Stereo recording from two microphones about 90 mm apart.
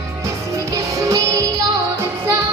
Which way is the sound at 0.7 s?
40° right (ahead or behind).